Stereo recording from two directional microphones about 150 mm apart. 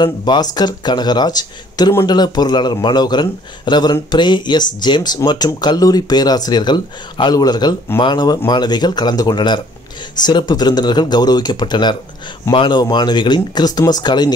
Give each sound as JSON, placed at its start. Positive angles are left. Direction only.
{"t": 0.0, "sound": "speech", "side_deg": 30}